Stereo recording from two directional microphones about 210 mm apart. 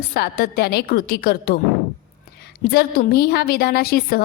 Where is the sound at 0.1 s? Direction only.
45° left (ahead or behind).